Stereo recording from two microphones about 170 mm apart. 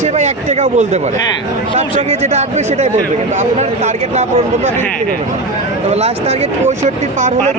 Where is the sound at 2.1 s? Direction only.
40° right (ahead or behind).